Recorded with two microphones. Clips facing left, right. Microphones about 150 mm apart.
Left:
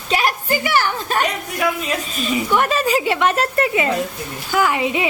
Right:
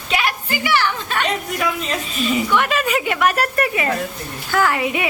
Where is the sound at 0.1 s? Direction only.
40° left (ahead or behind).